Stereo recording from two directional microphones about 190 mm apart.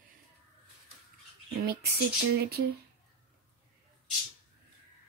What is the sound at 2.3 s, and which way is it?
Speech, 60° right (ahead or behind).